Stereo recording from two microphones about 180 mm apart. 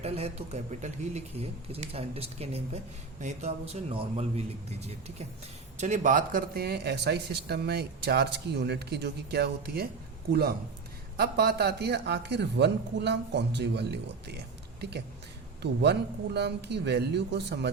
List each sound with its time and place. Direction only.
0.0 s a man's voice: 35° right (ahead or behind); by 9.9 s 60° right (ahead or behind)
11.2 s a man's voice: 65° right (ahead or behind)
15.6 s a man's voice: 70° right (ahead or behind)